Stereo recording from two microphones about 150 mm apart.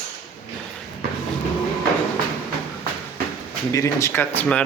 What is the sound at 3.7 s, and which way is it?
Speech, 20° left (ahead or behind).